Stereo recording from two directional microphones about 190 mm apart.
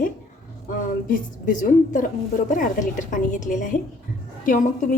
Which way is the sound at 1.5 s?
45° left (ahead or behind).